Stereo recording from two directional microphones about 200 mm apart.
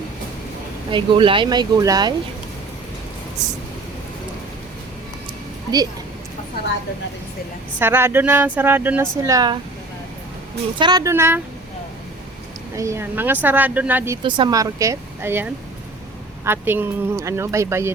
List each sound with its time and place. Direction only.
0.9 s speech: 25° right (ahead or behind)
7.8 s speech: 10° right (ahead or behind)
10.8 s speech: 20° right (ahead or behind)
12.7 s speech: 15° right (ahead or behind)
14.3 s speech: 25° right (ahead or behind)